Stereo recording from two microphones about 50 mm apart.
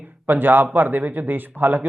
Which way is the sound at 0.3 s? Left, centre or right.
Right.